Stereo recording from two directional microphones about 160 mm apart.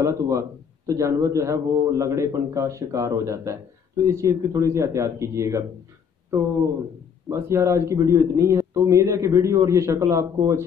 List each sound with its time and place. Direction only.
0.0 s a man's voice: 20° right (ahead or behind)
7.2 s a man's voice: 20° right (ahead or behind)